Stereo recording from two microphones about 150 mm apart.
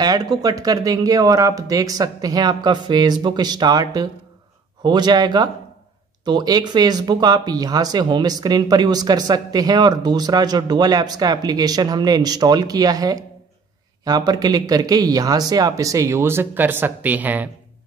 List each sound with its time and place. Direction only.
0.0 s speech: 25° right (ahead or behind)